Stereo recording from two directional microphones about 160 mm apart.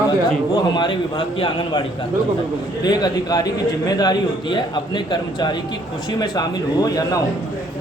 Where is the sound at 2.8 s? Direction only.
25° left (ahead or behind).